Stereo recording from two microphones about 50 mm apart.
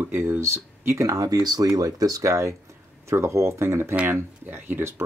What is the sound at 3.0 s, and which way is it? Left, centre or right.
Speech, right.